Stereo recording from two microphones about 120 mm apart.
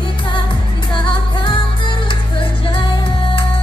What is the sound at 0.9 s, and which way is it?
Music, 45° left (ahead or behind).